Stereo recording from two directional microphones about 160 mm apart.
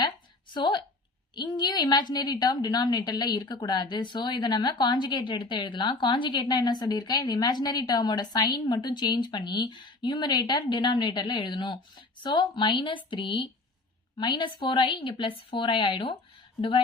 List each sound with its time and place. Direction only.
0.5 s a woman's voice: 30° left (ahead or behind)